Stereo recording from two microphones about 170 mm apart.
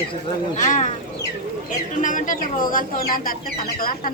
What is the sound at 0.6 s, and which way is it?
Speech, 50° left (ahead or behind).